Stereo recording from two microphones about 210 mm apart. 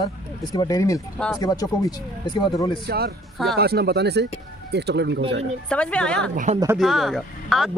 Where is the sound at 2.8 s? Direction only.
50° right (ahead or behind).